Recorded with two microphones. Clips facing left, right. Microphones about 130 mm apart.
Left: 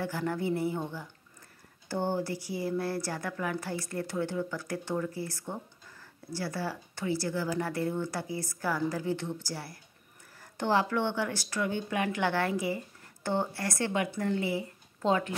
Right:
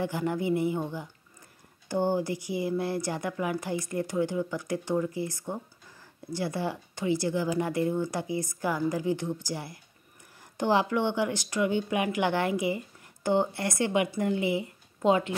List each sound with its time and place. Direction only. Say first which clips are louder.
0.0 s speech: right 3 dB; 15° right (ahead or behind)